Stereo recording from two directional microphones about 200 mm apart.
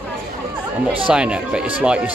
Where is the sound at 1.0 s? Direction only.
5° right (ahead or behind).